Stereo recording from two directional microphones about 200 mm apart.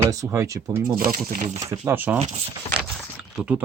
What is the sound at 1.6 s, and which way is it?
Speech, 15° right (ahead or behind).